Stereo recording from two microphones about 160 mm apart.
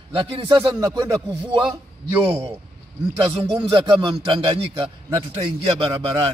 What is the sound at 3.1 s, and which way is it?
A man's voice, 30° right (ahead or behind).